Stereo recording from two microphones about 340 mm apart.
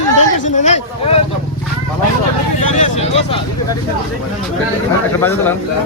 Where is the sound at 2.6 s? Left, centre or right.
Left.